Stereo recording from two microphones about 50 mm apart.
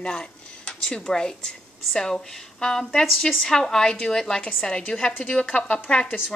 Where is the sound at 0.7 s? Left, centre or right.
Centre.